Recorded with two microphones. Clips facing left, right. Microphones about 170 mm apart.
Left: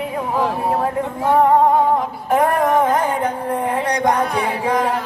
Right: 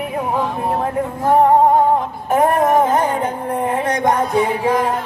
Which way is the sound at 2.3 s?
25° right (ahead or behind).